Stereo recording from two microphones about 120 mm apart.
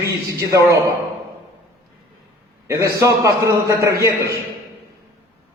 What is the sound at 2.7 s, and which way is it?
A man's voice, 25° right (ahead or behind).